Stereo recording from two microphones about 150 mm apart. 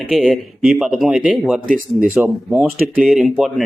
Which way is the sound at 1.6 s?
65° right (ahead or behind).